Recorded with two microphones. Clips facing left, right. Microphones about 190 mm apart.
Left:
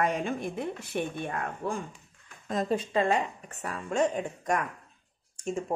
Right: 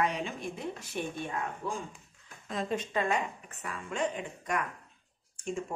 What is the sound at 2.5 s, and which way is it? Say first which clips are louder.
Speech: left 5 dB; 40° left (ahead or behind).